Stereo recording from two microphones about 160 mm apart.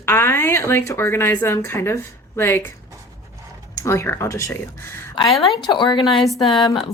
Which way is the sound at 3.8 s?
15° left (ahead or behind).